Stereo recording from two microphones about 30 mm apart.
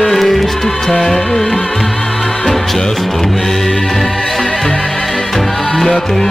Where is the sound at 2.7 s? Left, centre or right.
Centre.